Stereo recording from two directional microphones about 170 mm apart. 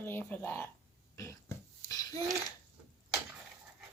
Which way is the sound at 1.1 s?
15° left (ahead or behind).